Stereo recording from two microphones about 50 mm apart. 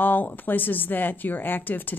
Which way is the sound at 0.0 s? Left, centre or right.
Left.